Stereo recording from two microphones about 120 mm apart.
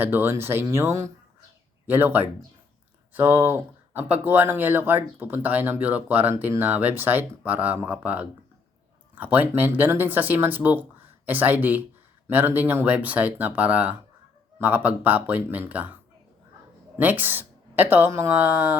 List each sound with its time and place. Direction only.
0.0 s speech: 15° right (ahead or behind)
17.0 s speech: 15° right (ahead or behind)